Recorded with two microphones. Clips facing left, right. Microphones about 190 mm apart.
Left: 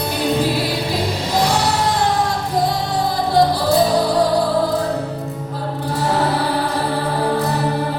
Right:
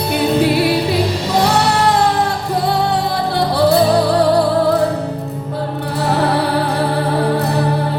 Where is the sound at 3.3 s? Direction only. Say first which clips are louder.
Right 2 dB; 65° right (ahead or behind).